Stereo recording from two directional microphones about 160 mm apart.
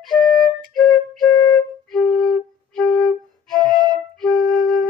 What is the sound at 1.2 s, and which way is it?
Flute, 25° left (ahead or behind).